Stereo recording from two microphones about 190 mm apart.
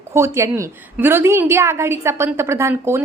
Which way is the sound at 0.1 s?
15° right (ahead or behind).